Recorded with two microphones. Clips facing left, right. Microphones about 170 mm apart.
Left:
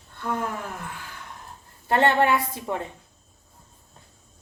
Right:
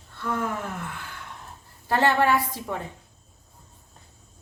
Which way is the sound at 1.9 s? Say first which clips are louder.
Left 1 dB; 25° left (ahead or behind).